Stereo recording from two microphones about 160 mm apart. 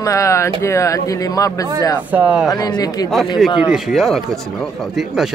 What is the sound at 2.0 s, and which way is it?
Speech, 10° right (ahead or behind).